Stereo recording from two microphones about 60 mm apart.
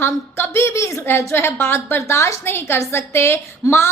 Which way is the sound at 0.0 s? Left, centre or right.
Left.